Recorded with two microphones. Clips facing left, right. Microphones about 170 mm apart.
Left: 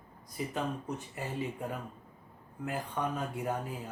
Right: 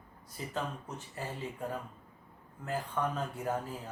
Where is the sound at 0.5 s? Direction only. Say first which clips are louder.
Left 2 dB; 15° left (ahead or behind).